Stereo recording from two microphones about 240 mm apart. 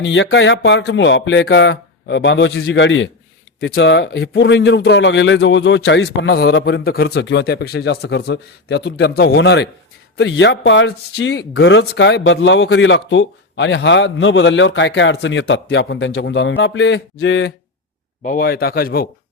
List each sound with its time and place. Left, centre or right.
0.0 s speech: left
18.2 s speech: left